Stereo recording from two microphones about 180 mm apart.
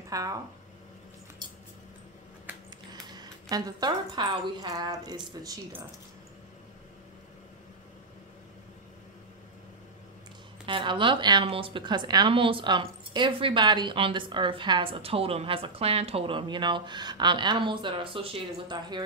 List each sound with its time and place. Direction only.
0.1 s speech: 20° right (ahead or behind)
2.9 s speech: 20° right (ahead or behind)
10.7 s speech: 25° right (ahead or behind)